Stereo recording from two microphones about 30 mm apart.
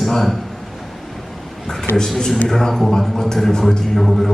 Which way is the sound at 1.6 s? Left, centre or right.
Centre.